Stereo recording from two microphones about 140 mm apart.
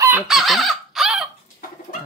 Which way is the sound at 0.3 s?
Centre (ahead or behind).